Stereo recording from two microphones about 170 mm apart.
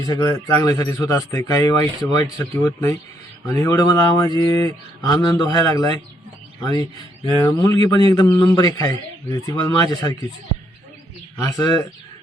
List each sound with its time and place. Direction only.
0.1 s speech: 20° left (ahead or behind)
7.3 s speech: 20° left (ahead or behind)
11.4 s speech: 20° left (ahead or behind)